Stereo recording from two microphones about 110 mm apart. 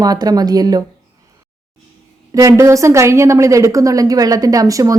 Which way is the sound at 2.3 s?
30° right (ahead or behind).